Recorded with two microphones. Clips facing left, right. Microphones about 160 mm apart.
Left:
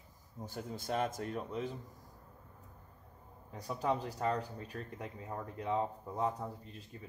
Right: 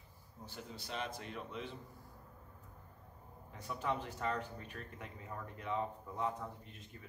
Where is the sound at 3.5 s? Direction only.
35° left (ahead or behind).